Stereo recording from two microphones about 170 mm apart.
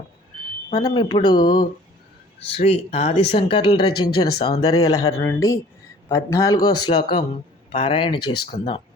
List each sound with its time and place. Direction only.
0.7 s speech: 25° left (ahead or behind)
2.5 s speech: 35° left (ahead or behind)